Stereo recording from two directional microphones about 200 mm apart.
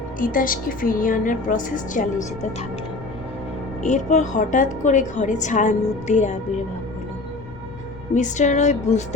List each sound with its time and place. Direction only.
0.2 s a woman's voice: 45° left (ahead or behind)
3.8 s a woman's voice: 40° left (ahead or behind)
8.1 s a woman's voice: 35° left (ahead or behind)